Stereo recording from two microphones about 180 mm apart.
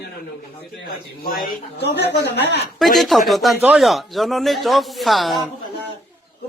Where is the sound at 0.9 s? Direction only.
55° left (ahead or behind); by 2.7 s 70° left (ahead or behind).